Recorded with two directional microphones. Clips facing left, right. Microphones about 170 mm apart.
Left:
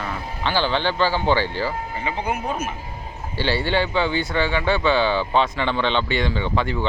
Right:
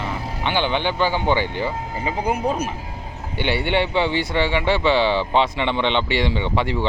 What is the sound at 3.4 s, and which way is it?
Speech, 20° right (ahead or behind).